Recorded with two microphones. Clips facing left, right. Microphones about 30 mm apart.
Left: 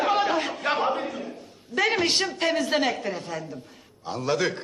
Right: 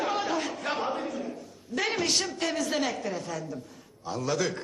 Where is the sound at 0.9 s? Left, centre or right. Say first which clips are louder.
Left 4 dB; left.